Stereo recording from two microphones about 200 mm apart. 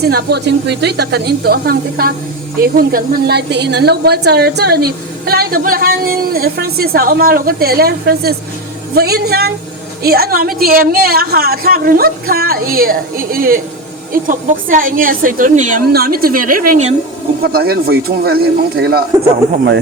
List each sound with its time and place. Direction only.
0.0 s a woman's voice: 50° right (ahead or behind)
17.4 s a woman's voice: 50° right (ahead or behind)